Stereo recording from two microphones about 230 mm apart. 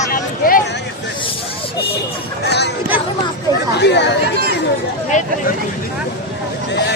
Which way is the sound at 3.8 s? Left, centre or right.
Left.